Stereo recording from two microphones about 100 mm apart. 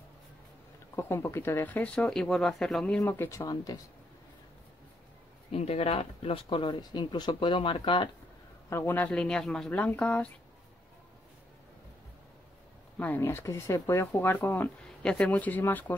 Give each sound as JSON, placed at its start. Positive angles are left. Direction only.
{"t": 0.9, "sound": "speech", "side_deg": 25}
{"t": 3.1, "sound": "speech", "side_deg": 25}
{"t": 5.5, "sound": "speech", "side_deg": 90}
{"t": 8.6, "sound": "speech", "side_deg": 25}
{"t": 9.7, "sound": "speech", "side_deg": 15}
{"t": 12.9, "sound": "speech", "side_deg": 15}